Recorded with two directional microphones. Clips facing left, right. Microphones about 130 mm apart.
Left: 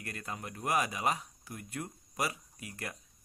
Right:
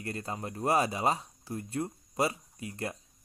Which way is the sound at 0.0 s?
30° right (ahead or behind).